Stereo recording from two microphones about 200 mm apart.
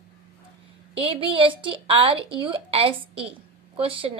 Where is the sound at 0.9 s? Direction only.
25° right (ahead or behind).